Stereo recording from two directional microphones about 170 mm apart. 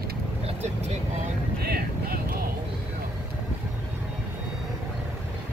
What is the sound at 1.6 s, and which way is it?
Vehicle, 65° right (ahead or behind).